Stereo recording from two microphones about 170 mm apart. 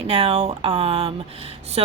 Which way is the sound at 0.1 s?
35° right (ahead or behind).